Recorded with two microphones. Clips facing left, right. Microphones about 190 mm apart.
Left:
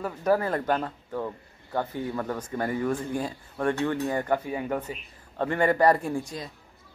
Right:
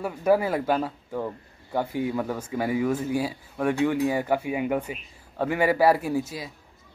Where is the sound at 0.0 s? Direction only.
10° right (ahead or behind).